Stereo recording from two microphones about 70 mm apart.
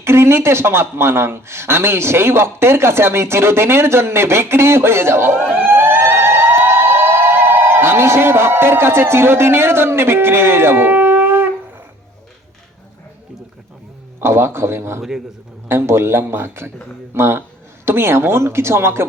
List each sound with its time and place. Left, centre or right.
0.0 s speech: right
5.5 s a sound: right
14.2 s speech: right